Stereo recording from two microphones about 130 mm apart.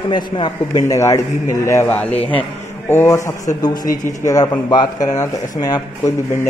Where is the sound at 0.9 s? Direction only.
20° left (ahead or behind).